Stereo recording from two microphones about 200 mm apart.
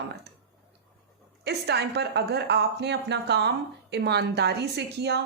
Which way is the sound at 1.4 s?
55° right (ahead or behind).